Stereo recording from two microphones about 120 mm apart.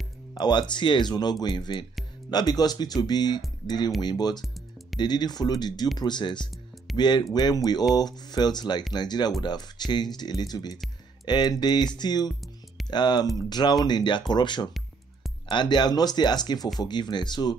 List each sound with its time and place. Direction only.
0.3 s speech: 35° left (ahead or behind)
4.6 s music: centre (ahead or behind)
5.0 s speech: 35° left (ahead or behind)